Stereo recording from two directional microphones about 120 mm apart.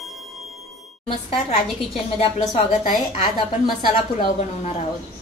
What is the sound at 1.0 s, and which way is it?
A woman's voice, 50° left (ahead or behind).